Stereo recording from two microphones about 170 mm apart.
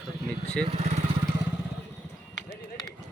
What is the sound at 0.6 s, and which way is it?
Vehicle, 40° right (ahead or behind).